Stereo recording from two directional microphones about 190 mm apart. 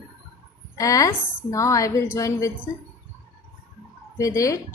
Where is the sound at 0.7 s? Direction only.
15° left (ahead or behind).